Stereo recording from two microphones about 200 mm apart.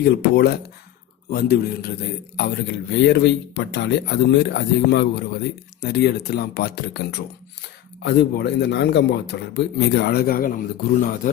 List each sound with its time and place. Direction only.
0.0 s speech: 55° left (ahead or behind)